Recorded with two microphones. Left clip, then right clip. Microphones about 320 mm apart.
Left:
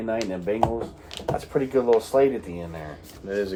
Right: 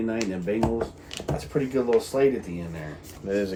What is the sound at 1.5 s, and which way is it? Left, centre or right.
Speech, centre.